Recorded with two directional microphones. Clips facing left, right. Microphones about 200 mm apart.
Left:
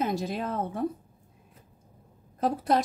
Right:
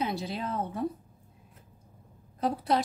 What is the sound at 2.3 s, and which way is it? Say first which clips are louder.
Speech: left 2 dB; 45° left (ahead or behind).